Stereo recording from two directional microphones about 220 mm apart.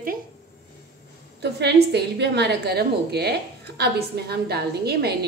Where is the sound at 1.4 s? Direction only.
50° right (ahead or behind).